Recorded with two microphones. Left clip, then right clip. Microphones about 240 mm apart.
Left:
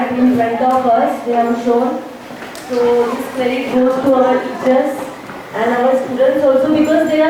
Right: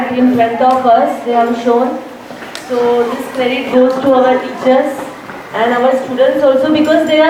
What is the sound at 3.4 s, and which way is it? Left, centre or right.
Speech, centre.